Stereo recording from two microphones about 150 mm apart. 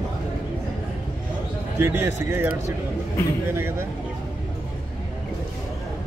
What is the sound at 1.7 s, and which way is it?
Speech, 15° right (ahead or behind).